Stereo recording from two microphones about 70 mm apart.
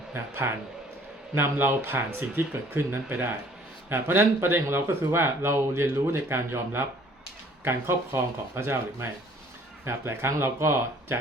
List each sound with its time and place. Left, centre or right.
0.1 s speech: right